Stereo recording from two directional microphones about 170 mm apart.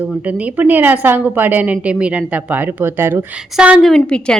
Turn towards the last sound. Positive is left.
turn(degrees=5)  # may be behind; listen again after turning